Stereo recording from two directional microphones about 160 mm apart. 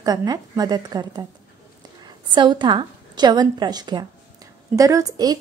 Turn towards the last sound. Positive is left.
turn(degrees=-25)  # may be behind; listen again after turning